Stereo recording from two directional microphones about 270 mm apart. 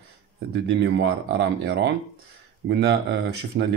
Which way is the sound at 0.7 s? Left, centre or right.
Right.